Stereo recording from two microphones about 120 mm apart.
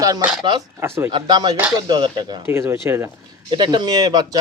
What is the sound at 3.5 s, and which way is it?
Speech, 40° right (ahead or behind).